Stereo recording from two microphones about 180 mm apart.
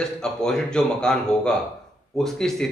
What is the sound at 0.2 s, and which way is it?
A man's voice, 5° left (ahead or behind).